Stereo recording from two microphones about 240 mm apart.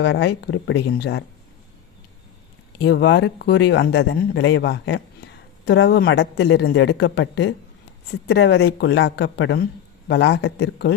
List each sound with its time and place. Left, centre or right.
0.0 s speech: left
2.7 s speech: left